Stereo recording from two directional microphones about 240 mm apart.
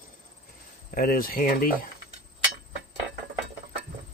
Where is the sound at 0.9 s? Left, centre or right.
Left.